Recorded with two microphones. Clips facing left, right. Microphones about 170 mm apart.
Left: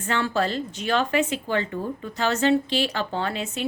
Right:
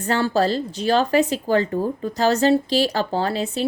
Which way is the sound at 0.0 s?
35° right (ahead or behind).